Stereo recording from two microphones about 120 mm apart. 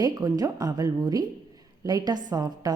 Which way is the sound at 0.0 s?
30° right (ahead or behind).